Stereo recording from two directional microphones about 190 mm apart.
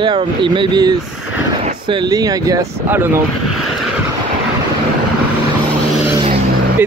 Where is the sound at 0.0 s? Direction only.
25° right (ahead or behind).